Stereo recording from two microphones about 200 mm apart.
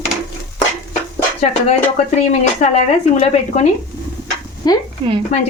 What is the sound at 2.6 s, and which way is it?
Speech, 40° left (ahead or behind).